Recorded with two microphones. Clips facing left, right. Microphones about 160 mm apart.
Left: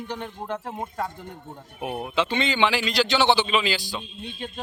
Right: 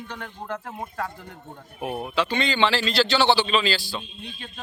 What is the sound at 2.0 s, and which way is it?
A man's voice, 20° left (ahead or behind).